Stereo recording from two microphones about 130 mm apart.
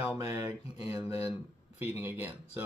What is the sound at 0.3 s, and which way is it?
Speech, 20° right (ahead or behind).